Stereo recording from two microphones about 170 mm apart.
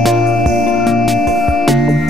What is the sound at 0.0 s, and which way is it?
Music, centre (ahead or behind).